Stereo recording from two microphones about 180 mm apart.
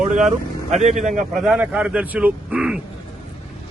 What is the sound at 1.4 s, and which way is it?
Speech, 5° right (ahead or behind).